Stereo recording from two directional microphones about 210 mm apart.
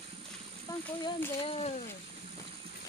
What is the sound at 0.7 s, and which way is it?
Speech, 15° left (ahead or behind).